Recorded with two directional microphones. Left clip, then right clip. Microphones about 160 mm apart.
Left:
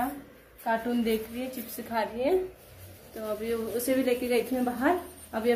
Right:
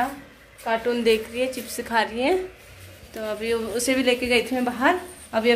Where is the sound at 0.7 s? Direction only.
15° right (ahead or behind).